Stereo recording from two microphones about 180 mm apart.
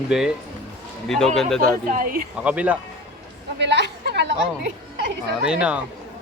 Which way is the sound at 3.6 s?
75° right (ahead or behind).